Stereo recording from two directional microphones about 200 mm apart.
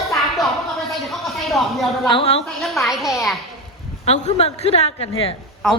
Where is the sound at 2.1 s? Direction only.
30° left (ahead or behind).